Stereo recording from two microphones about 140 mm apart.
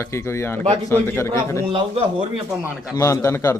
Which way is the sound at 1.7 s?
40° right (ahead or behind).